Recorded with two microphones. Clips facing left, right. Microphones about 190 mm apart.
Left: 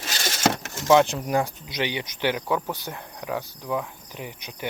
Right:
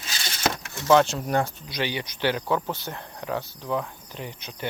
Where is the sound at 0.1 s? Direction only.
45° left (ahead or behind).